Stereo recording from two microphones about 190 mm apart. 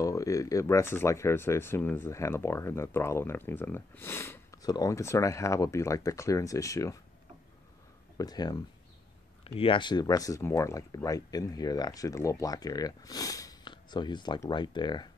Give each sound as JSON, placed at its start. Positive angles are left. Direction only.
{"t": 0.0, "sound": "speech", "side_deg": 15}
{"t": 8.2, "sound": "speech", "side_deg": 20}
{"t": 9.6, "sound": "speech", "side_deg": 25}